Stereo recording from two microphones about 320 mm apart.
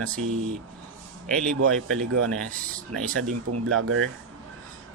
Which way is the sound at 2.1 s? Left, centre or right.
Right.